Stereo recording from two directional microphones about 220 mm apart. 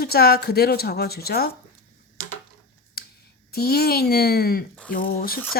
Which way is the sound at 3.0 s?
45° left (ahead or behind).